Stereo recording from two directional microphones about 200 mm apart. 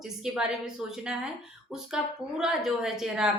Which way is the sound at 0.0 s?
5° right (ahead or behind).